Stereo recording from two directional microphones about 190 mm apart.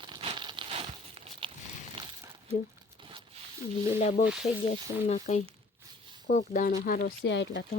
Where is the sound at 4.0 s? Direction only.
35° left (ahead or behind); by 7.7 s 70° left (ahead or behind).